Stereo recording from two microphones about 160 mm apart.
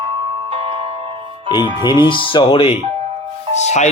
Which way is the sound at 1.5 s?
30° left (ahead or behind).